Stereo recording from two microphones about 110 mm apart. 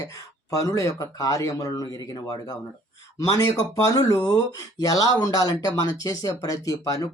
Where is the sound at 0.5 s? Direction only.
30° left (ahead or behind).